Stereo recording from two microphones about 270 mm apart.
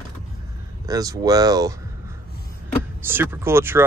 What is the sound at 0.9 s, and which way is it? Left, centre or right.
Speech, centre.